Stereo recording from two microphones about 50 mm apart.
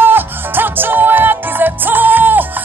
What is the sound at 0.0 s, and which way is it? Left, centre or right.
Music, right.